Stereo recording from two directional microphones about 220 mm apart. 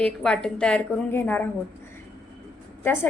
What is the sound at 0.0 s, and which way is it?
A woman's voice, 5° left (ahead or behind).